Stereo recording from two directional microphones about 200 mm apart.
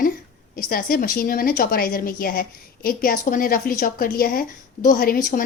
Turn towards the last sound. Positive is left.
turn(degrees=40)  # may be behind; listen again after turning